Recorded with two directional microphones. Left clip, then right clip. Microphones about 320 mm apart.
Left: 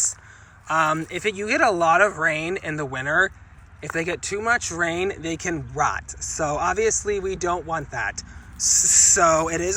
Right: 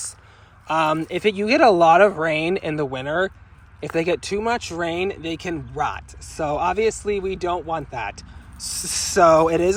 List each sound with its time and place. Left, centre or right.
0.7 s speech: centre